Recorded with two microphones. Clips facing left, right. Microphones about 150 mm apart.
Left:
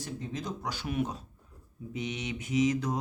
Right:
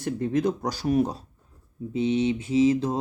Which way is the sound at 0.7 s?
40° right (ahead or behind).